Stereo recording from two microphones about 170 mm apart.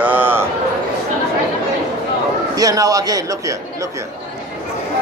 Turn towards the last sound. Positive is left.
turn(degrees=-20)  # may be behind; listen again after turning